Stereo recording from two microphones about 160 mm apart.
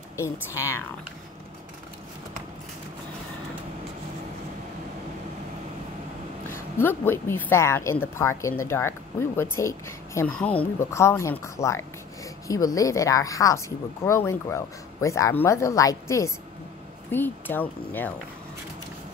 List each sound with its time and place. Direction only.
0.2 s a woman's voice: 15° left (ahead or behind)
6.8 s a woman's voice: 15° left (ahead or behind)